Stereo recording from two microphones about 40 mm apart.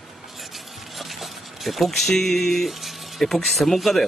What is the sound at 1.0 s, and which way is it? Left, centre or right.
Speech, centre.